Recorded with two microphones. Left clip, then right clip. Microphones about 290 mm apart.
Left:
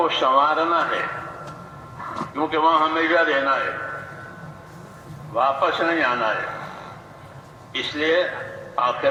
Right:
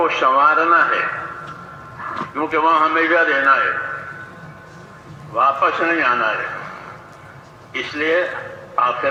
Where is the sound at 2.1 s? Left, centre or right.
Centre.